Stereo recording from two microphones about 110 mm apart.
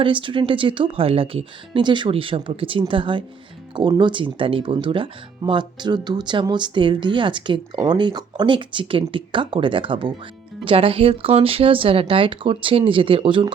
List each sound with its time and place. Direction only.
0.0 s speech: 50° right (ahead or behind)